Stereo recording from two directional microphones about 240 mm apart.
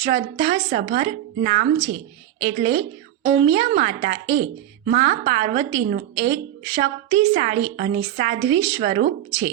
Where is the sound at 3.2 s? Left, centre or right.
Right.